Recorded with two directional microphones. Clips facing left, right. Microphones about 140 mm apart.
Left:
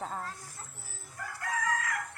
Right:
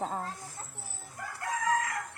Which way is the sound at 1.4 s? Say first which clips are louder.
Right 3 dB; 25° right (ahead or behind).